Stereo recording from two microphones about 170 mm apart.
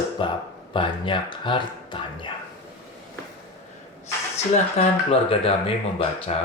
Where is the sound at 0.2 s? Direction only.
30° left (ahead or behind).